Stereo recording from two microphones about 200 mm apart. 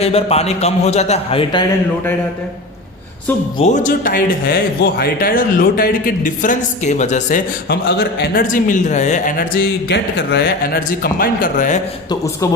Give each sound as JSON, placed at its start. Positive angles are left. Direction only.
{"t": 0.0, "sound": "a man's voice", "side_deg": 30}
{"t": 3.6, "sound": "speech", "side_deg": 40}
{"t": 7.7, "sound": "speech", "side_deg": 55}